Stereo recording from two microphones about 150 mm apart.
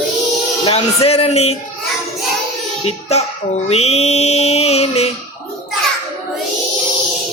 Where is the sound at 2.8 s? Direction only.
45° left (ahead or behind).